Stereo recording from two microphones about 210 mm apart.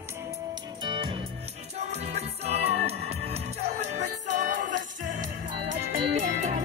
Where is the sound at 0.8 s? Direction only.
25° right (ahead or behind).